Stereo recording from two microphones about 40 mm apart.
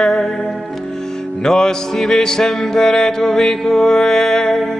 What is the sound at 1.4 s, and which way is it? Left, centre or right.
Mantra, centre.